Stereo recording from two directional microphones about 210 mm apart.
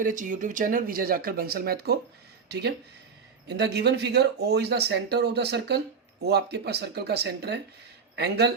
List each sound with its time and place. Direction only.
0.0 s speech: 40° right (ahead or behind)